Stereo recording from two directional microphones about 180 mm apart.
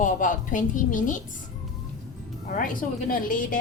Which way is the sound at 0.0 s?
45° left (ahead or behind).